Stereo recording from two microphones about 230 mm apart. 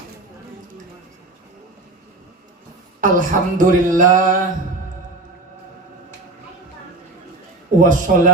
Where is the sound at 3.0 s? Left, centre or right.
Right.